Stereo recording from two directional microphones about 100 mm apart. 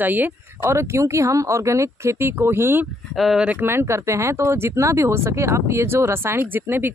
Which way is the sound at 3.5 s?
20° right (ahead or behind).